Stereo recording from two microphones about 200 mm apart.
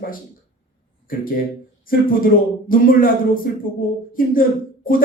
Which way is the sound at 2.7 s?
45° left (ahead or behind).